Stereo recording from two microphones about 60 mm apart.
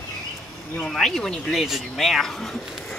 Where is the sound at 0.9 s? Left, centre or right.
Centre.